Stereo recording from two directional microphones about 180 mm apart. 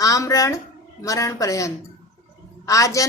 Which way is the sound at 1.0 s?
20° left (ahead or behind).